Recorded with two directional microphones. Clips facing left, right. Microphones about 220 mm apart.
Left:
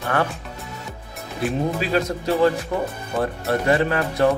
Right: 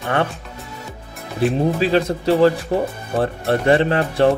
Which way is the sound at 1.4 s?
30° right (ahead or behind).